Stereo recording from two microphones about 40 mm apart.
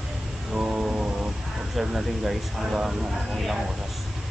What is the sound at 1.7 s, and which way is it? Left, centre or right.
Speech, centre.